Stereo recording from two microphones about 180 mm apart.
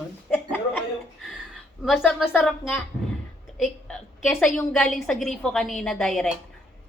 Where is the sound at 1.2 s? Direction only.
Centre (ahead or behind).